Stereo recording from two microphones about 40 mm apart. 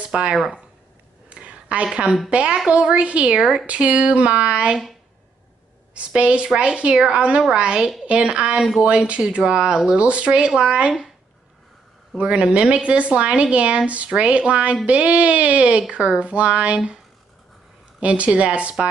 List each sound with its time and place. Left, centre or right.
0.1 s speech: right
1.3 s a sound: right
2.2 s a woman's voice: right
3.3 s speech: centre
3.6 s speech: right
5.9 s a woman's voice: right
10.0 s a woman's voice: right
12.2 s a woman's voice: right
18.0 s speech: right